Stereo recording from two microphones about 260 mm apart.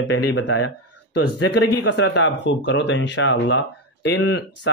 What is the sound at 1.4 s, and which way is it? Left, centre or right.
Speech, left.